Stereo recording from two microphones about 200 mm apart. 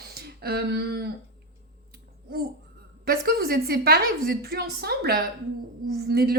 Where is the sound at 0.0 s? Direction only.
50° right (ahead or behind).